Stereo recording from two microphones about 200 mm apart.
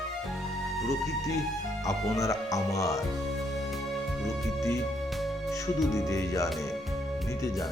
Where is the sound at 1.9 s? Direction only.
15° left (ahead or behind).